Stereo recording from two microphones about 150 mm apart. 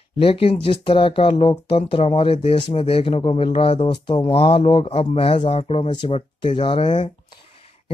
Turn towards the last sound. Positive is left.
turn(degrees=35)  # may be behind; listen again after turning